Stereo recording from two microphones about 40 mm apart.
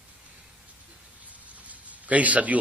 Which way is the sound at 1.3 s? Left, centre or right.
Right.